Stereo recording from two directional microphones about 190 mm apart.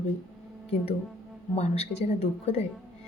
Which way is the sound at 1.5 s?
35° left (ahead or behind).